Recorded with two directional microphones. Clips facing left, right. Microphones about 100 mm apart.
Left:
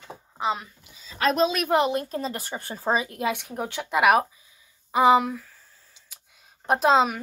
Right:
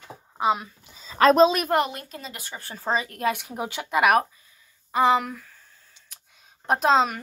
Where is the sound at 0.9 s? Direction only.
45° right (ahead or behind).